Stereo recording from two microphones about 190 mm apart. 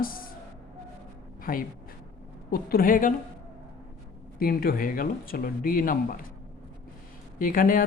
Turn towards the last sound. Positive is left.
turn(degrees=45)  # may be behind; listen again after turning